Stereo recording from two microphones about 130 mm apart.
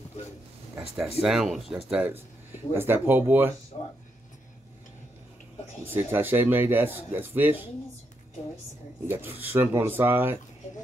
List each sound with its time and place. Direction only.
1.2 s speech: 5° right (ahead or behind)
3.7 s speech: 45° left (ahead or behind)
5.9 s speech: 15° right (ahead or behind)
9.0 s speech: 15° right (ahead or behind)